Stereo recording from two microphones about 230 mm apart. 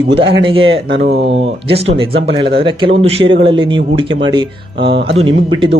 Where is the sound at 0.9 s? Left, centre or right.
Right.